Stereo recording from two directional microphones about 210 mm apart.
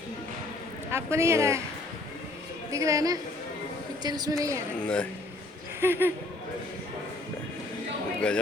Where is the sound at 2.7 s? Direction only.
15° right (ahead or behind).